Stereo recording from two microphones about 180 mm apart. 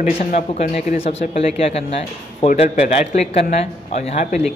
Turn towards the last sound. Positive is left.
turn(degrees=40)  # may be behind; listen again after turning